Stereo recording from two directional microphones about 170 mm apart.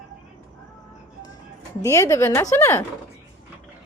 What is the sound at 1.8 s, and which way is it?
A woman's voice, 15° left (ahead or behind).